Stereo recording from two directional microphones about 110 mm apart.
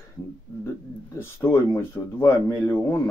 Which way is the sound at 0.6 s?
25° left (ahead or behind).